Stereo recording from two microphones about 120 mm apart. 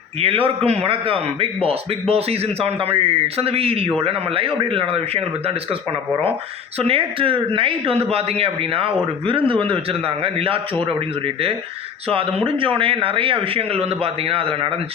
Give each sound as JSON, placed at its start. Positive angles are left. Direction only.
{"t": 0.2, "sound": "a man's voice", "side_deg": -50}
{"t": 6.7, "sound": "a man's voice", "side_deg": -50}
{"t": 12.0, "sound": "a man's voice", "side_deg": -50}